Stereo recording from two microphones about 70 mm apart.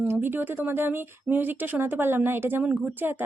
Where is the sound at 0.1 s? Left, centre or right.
Right.